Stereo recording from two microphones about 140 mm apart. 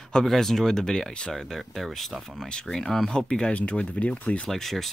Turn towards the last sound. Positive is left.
turn(degrees=0)  # may be behind; listen again after turning